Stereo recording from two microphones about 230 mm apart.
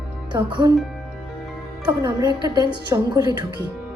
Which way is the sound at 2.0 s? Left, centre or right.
Centre.